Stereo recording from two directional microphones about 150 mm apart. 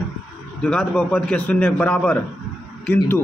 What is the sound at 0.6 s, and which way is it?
A man's voice, 5° left (ahead or behind).